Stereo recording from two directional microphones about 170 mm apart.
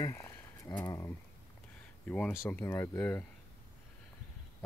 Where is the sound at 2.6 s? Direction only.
15° left (ahead or behind).